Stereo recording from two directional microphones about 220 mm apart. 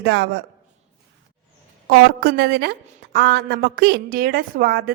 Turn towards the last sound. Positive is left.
turn(degrees=-45)  # may be behind; listen again after turning